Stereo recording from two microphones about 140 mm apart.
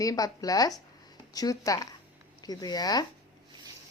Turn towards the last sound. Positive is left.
turn(degrees=30)  # may be behind; listen again after turning